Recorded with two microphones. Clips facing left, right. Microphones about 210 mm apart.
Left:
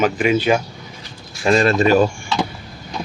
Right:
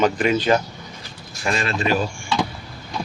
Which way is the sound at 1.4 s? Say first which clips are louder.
Left 8 dB; 35° left (ahead or behind).